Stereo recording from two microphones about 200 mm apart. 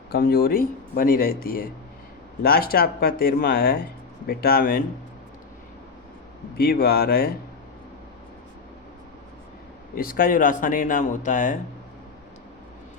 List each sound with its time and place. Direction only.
0.1 s speech: 50° left (ahead or behind)
6.6 s speech: 50° left (ahead or behind)
9.9 s speech: 45° left (ahead or behind)